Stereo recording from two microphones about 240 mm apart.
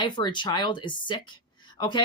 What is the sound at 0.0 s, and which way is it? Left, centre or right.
Speech, centre.